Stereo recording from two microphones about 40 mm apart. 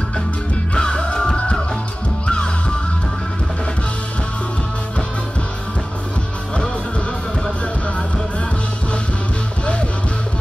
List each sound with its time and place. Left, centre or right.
0.7 s music: centre